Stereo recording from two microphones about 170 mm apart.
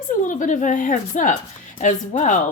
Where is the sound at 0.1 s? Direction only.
50° left (ahead or behind).